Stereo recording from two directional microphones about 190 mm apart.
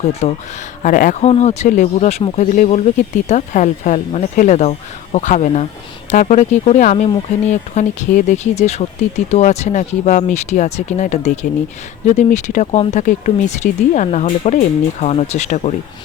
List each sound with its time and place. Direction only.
0.1 s speech: 35° left (ahead or behind)